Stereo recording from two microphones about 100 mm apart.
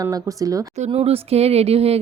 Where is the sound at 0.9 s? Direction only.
85° right.